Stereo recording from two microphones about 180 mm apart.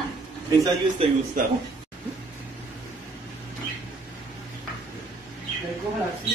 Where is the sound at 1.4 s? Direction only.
50° right (ahead or behind).